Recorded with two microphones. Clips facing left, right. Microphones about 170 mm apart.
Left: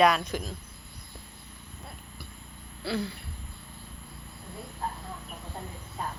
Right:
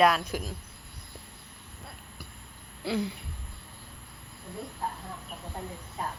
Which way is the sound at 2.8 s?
15° right (ahead or behind).